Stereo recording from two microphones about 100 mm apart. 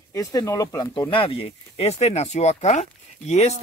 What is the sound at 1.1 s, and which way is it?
Speech, 70° left (ahead or behind).